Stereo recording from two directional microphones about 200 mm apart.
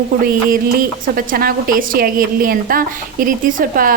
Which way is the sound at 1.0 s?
45° right (ahead or behind).